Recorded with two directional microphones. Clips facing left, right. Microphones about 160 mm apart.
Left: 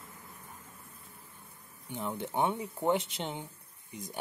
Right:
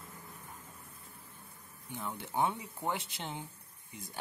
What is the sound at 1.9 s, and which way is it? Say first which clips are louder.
Speech: left 3 dB; 20° left (ahead or behind).